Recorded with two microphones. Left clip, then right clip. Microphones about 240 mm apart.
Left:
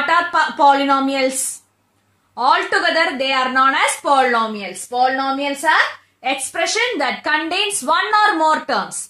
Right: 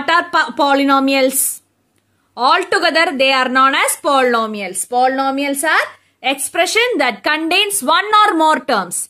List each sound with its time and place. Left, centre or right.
0.0 s a woman's voice: right
2.4 s a woman's voice: right
2.8 s a woman's voice: right